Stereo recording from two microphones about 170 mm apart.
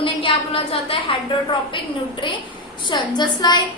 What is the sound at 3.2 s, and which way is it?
Speech, 25° left (ahead or behind).